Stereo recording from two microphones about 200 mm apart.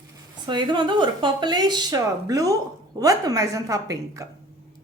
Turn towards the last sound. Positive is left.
turn(degrees=-15)  # may be behind; listen again after turning